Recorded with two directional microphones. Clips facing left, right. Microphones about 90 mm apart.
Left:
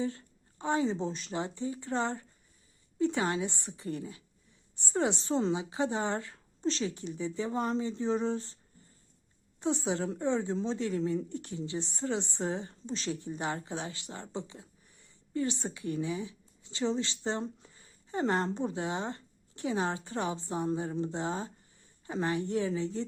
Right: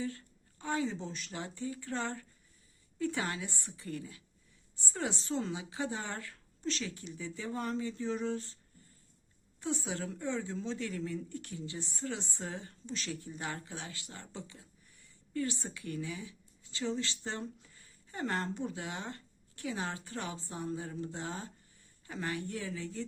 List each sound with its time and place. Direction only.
0.0 s a woman's voice: 25° left (ahead or behind)
9.6 s a woman's voice: 25° left (ahead or behind)